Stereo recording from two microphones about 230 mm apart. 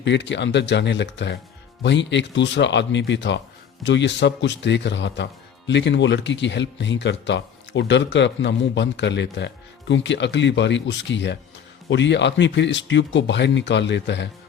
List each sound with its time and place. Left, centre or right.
0.0 s speech: left